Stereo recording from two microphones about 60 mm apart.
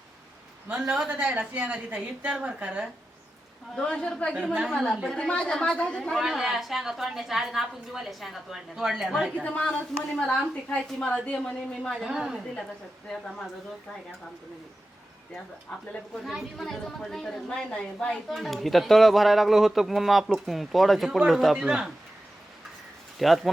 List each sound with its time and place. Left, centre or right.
1.2 s a woman's voice: right
3.8 s a woman's voice: centre
6.1 s a woman's voice: centre
9.4 s a woman's voice: left
12.0 s a man's voice: centre
16.2 s a woman's voice: centre
18.3 s a woman's voice: centre
23.1 s speech: centre